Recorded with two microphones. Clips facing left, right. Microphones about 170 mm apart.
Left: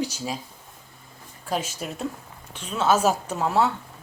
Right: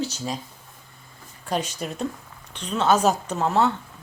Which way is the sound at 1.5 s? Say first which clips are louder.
Right 1 dB; 5° left (ahead or behind).